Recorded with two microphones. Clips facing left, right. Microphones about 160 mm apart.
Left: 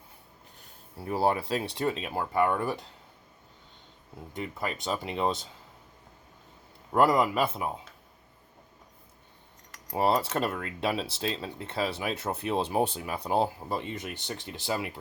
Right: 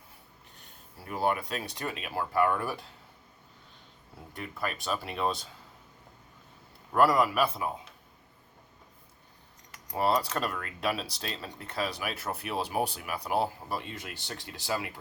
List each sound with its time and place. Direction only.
0.9 s speech: 30° left (ahead or behind)
4.4 s speech: 20° left (ahead or behind)
6.9 s speech: 20° left (ahead or behind)
9.9 s speech: 25° left (ahead or behind)